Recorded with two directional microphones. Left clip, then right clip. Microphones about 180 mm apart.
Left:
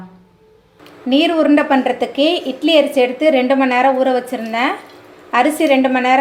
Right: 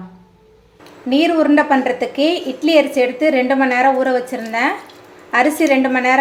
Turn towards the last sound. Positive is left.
turn(degrees=5)  # may be behind; listen again after turning